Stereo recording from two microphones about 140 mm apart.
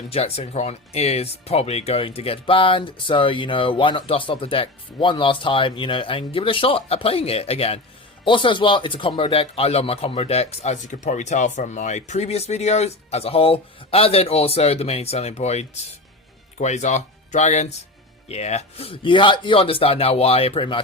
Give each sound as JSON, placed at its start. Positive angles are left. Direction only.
{"t": 0.1, "sound": "speech", "side_deg": 45}